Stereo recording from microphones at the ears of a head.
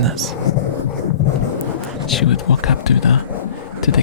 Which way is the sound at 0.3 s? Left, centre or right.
Left.